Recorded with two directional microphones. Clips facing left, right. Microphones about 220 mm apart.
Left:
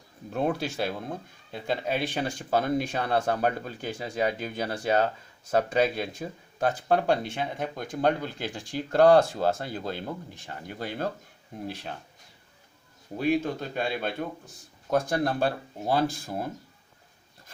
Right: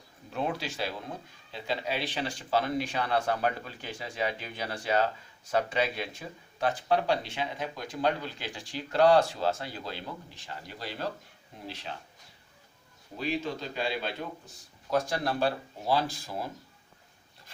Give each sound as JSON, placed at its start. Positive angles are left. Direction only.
{"t": 0.3, "sound": "speech", "side_deg": 50}
{"t": 13.1, "sound": "speech", "side_deg": 55}